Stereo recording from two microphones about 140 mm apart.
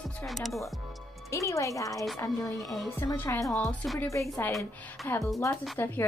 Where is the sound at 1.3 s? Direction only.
20° left (ahead or behind).